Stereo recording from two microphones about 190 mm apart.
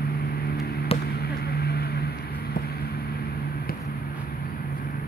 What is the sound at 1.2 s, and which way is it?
Vehicle, 55° left (ahead or behind).